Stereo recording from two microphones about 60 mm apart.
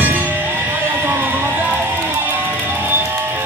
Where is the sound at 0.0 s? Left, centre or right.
Right.